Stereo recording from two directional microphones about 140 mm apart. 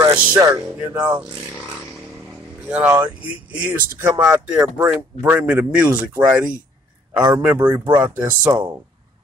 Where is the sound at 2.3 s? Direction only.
10° right (ahead or behind).